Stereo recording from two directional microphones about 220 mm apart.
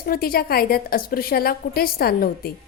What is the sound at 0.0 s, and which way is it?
A woman's voice, 45° left (ahead or behind).